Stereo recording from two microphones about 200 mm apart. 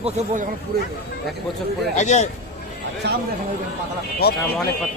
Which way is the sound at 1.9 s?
35° left (ahead or behind).